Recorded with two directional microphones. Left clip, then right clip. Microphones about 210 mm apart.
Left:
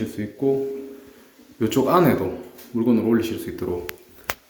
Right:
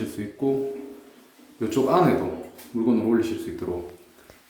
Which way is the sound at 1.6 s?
20° left (ahead or behind).